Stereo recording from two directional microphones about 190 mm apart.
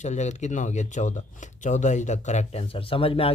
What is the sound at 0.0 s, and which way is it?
Speech, 40° left (ahead or behind).